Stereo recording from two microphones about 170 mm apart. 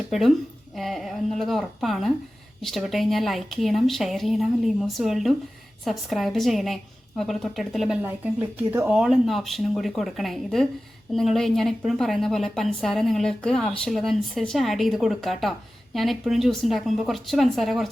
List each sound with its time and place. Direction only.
0.1 s a woman's voice: centre (ahead or behind)
8.0 s a woman's voice: 10° right (ahead or behind)